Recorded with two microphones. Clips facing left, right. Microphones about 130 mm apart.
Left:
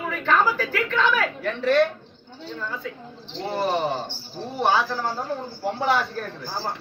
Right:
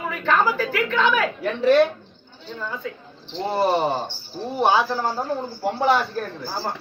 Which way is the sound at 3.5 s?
30° right (ahead or behind).